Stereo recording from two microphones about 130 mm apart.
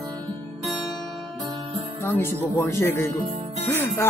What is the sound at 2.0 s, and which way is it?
Speech, 20° left (ahead or behind).